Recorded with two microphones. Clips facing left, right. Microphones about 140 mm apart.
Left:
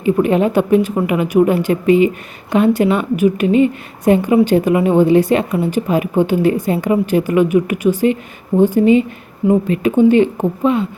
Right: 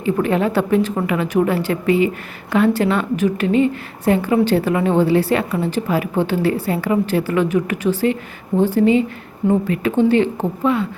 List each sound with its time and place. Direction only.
0.0 s a woman's voice: 15° left (ahead or behind)